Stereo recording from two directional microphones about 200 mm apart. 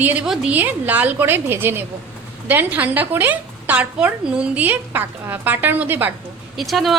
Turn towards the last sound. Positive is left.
turn(degrees=0)  # may be behind; listen again after turning